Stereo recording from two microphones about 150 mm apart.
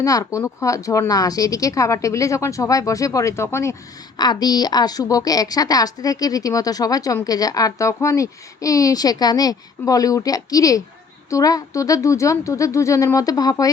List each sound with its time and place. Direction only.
0.0 s a woman's voice: 20° left (ahead or behind)